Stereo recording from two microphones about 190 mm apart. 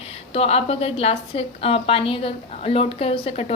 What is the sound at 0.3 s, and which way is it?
A woman's voice, 30° left (ahead or behind).